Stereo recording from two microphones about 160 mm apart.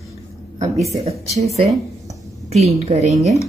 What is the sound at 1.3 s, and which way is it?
A woman's voice, 40° right (ahead or behind).